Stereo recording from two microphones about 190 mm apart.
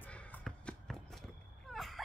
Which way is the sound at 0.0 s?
5° left (ahead or behind).